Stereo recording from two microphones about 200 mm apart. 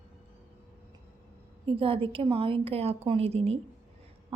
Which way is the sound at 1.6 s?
25° right (ahead or behind).